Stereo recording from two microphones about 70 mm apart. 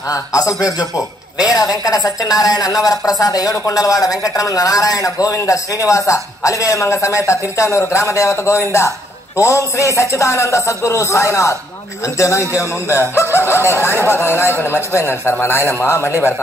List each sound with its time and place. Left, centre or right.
0.1 s a man's voice: left